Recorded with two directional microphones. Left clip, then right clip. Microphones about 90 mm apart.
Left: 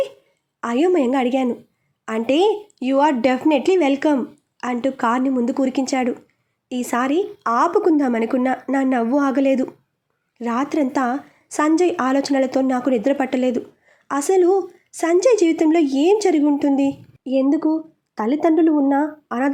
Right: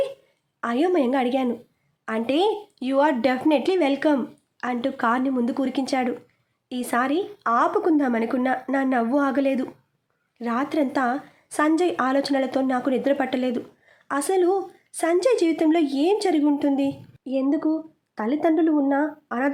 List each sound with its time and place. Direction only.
0.6 s a woman's voice: 25° left (ahead or behind); by 19.5 s 45° left (ahead or behind)